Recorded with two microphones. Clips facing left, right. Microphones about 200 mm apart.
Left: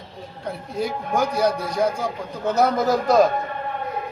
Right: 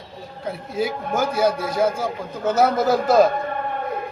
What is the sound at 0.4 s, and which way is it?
A man's voice, 5° right (ahead or behind).